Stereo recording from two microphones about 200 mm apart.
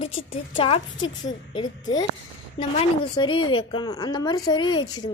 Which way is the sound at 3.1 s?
25° left (ahead or behind).